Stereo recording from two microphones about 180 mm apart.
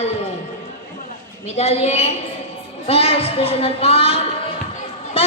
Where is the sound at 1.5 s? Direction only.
35° left (ahead or behind).